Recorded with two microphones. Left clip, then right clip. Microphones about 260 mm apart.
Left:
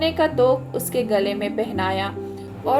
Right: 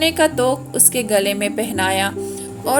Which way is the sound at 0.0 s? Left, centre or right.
Right.